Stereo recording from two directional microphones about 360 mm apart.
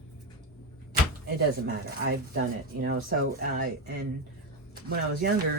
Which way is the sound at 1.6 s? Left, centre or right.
Right.